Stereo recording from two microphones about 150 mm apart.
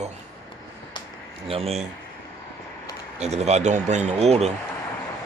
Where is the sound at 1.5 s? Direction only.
40° right (ahead or behind).